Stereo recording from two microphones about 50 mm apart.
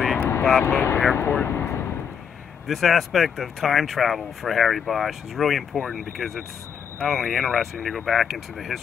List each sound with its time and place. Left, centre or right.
0.2 s vehicle: left
0.6 s speech: left
1.1 s vehicle: left
2.7 s speech: centre